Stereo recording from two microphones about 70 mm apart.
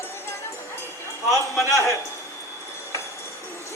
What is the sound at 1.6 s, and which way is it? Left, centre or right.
Speech, left.